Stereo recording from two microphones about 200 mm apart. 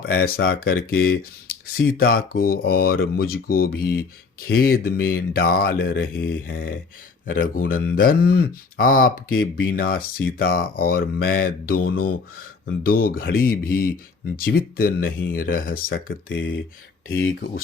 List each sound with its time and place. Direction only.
0.0 s speech: 50° left (ahead or behind)